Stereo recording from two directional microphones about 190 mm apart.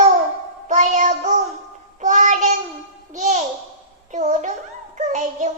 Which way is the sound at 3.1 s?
40° right (ahead or behind).